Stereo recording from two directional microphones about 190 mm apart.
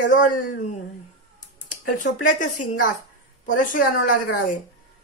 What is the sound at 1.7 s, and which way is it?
A woman's voice, 40° left (ahead or behind).